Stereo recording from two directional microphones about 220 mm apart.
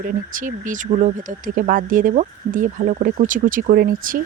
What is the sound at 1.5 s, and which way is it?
Speech, 35° right (ahead or behind).